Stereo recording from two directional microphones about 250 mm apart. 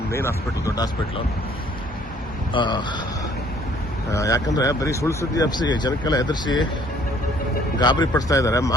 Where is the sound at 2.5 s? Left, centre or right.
Centre.